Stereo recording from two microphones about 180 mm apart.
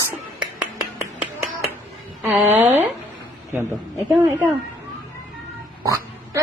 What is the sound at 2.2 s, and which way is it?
Speech, 10° right (ahead or behind).